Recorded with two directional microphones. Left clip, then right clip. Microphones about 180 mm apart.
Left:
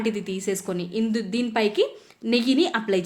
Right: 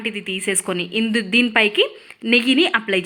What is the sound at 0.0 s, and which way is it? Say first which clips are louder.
A woman's voice: right 3 dB; 15° right (ahead or behind).